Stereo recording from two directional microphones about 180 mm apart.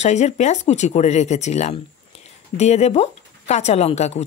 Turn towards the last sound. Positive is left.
turn(degrees=35)  # may be behind; listen again after turning